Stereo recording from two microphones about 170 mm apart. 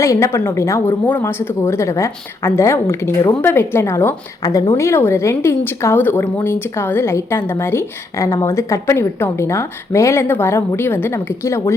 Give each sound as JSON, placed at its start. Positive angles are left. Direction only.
{"t": 0.0, "sound": "speech", "side_deg": 20}
{"t": 4.8, "sound": "speech", "side_deg": 15}